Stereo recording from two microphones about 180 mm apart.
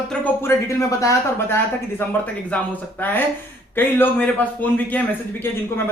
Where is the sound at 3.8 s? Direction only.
10° left (ahead or behind).